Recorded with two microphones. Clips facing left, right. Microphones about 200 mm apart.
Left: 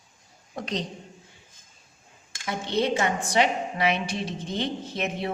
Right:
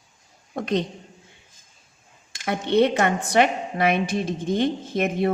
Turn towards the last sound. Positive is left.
turn(degrees=-50)  # may be behind; listen again after turning